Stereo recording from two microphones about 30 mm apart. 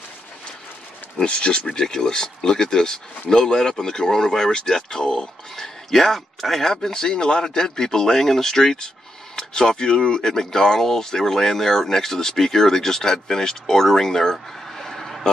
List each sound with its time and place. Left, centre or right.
1.1 s speech: left
1.8 s speech: left
5.6 s a man's voice: centre
6.6 s speech: centre